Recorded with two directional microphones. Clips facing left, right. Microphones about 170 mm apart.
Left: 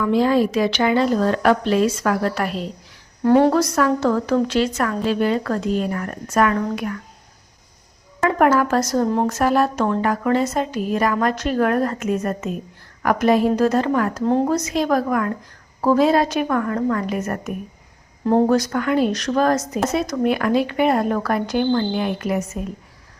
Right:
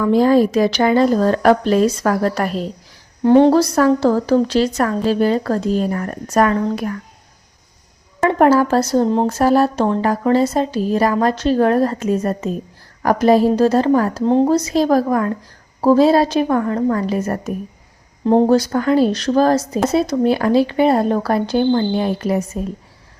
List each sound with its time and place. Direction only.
0.0 s a woman's voice: 40° right (ahead or behind)
3.2 s a woman's voice: 25° right (ahead or behind)
8.2 s a woman's voice: 30° right (ahead or behind)
14.3 s speech: 20° right (ahead or behind)
14.5 s a woman's voice: 35° right (ahead or behind)